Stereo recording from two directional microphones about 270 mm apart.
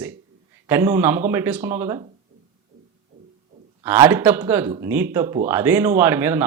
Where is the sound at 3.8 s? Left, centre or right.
Centre.